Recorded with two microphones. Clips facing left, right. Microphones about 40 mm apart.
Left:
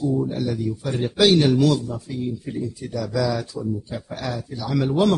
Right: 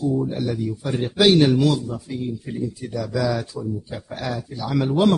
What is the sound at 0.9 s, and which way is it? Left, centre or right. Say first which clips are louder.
Speech: right 1 dB; centre.